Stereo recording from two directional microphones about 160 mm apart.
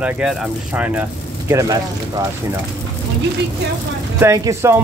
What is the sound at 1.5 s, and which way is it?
Speech, 20° right (ahead or behind).